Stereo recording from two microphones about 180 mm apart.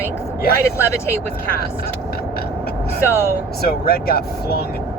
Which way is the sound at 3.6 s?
60° left (ahead or behind).